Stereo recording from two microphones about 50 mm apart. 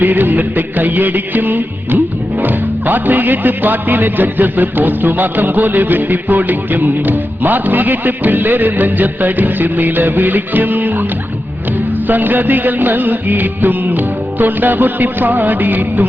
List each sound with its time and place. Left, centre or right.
0.0 s music: right
12.0 s music: right